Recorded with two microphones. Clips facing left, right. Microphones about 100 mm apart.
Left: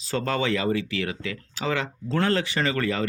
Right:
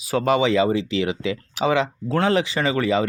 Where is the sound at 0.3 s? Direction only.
15° right (ahead or behind).